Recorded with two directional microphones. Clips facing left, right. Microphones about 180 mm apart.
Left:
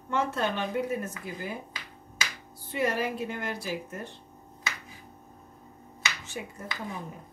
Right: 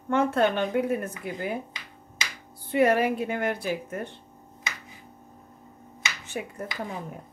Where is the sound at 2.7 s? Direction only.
60° right (ahead or behind).